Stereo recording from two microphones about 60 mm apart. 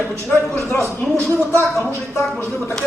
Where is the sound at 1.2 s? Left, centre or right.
Left.